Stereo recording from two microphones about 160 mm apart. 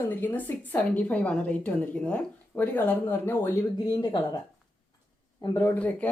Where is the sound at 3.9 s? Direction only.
25° left (ahead or behind).